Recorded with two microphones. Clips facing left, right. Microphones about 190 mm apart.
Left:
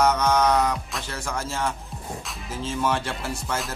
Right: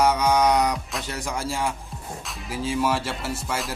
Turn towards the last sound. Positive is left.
turn(degrees=0)  # may be behind; listen again after turning